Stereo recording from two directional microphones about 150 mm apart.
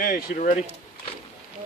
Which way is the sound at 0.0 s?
60° left (ahead or behind).